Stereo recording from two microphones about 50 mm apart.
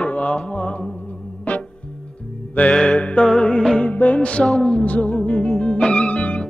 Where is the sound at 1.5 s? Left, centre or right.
Left.